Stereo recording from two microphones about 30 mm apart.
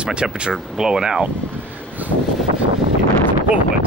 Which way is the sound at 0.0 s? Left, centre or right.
Right.